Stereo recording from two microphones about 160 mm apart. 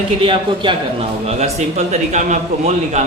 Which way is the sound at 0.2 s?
30° right (ahead or behind).